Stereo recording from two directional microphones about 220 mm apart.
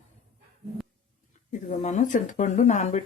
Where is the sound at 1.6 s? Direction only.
35° left (ahead or behind).